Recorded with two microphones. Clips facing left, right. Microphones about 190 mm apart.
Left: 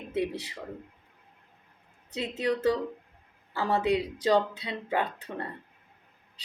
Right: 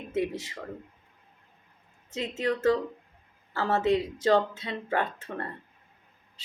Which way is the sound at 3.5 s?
15° left (ahead or behind).